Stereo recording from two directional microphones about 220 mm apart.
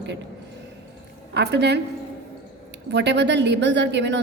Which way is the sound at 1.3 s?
50° right (ahead or behind).